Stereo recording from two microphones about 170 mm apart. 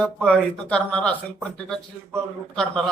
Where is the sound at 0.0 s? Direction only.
5° left (ahead or behind).